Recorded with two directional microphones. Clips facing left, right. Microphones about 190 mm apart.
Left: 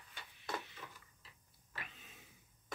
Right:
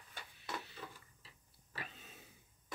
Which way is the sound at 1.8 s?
35° right (ahead or behind).